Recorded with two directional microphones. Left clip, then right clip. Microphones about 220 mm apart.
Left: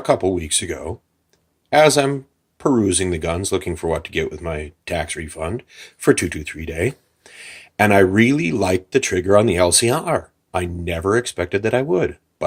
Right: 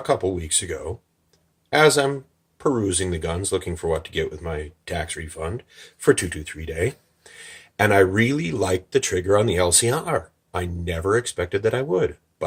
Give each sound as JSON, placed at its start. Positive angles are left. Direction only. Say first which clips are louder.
{"t": 0.0, "sound": "speech", "louder": "left 4 dB", "side_deg": 40}